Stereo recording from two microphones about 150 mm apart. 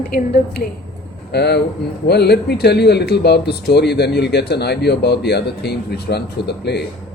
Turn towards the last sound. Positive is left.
turn(degrees=90)